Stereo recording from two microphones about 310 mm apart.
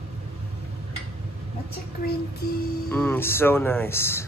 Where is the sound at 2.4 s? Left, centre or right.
Left.